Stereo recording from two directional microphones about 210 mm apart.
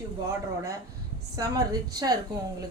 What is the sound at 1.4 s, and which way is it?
Speech, 15° right (ahead or behind).